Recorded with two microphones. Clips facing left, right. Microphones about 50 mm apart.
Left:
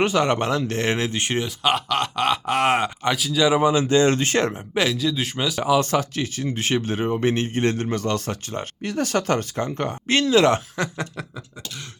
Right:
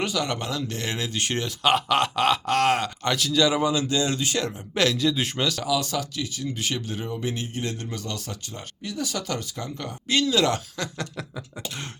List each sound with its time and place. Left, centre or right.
0.0 s speech: left
1.4 s speech: centre
2.5 s speech: centre; by 4.5 s left
4.7 s speech: centre
4.9 s speech: centre
5.4 s speech: centre
5.6 s speech: left